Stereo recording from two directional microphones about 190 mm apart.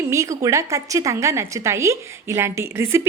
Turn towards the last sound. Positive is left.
turn(degrees=-15)  # may be behind; listen again after turning